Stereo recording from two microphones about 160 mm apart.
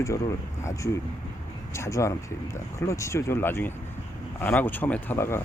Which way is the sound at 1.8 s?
20° left (ahead or behind).